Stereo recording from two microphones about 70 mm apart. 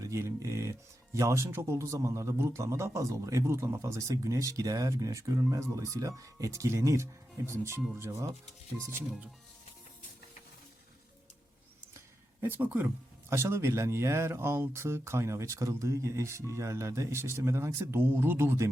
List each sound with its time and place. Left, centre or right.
0.0 s speech: right
12.4 s speech: right
13.3 s speech: right